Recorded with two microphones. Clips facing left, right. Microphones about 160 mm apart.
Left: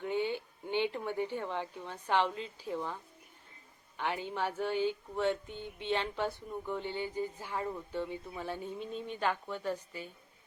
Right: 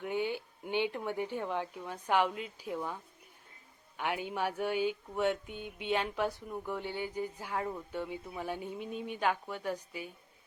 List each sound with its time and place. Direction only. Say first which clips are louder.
0.0 s speech: left 1 dB; 10° right (ahead or behind)
3.9 s mantra: right 1 dB; 10° right (ahead or behind)